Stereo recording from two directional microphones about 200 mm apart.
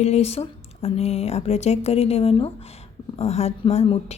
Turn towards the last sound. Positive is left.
turn(degrees=35)  # may be behind; listen again after turning